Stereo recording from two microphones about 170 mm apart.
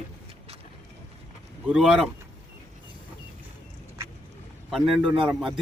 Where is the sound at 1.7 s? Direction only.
5° right (ahead or behind).